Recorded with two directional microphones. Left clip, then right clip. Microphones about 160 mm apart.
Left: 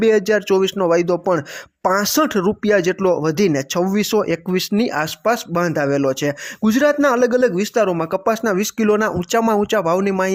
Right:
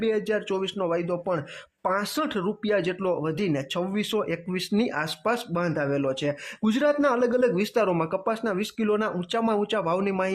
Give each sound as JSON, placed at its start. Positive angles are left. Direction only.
{"t": 0.0, "sound": "speech", "side_deg": 40}
{"t": 8.2, "sound": "speech", "side_deg": 40}